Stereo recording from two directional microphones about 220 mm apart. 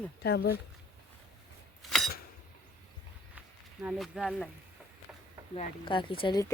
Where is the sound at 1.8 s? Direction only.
Centre (ahead or behind).